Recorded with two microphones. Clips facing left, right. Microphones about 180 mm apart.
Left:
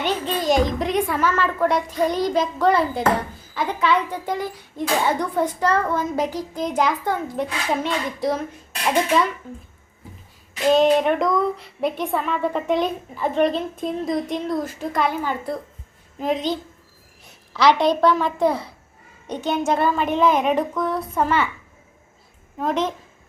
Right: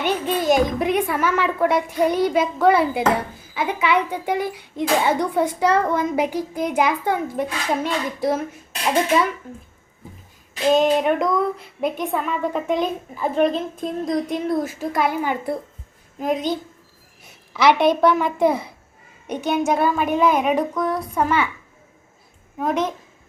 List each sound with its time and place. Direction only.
0.0 s a woman's voice: 10° right (ahead or behind)
10.7 s a woman's voice: centre (ahead or behind)
16.1 s a woman's voice: centre (ahead or behind)
17.6 s a child's voice: 20° right (ahead or behind)
22.5 s a child's voice: 10° right (ahead or behind)